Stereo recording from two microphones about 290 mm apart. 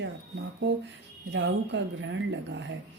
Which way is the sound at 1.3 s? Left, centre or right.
Right.